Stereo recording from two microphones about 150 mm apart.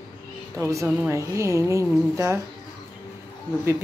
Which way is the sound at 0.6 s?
20° right (ahead or behind).